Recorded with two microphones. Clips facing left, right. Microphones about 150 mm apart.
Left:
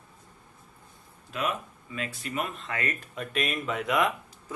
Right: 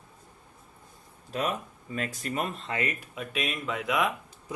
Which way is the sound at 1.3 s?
40° right (ahead or behind).